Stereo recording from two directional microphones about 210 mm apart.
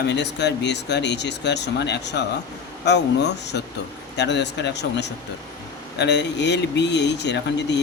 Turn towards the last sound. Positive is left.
turn(degrees=55)  # may be behind; listen again after turning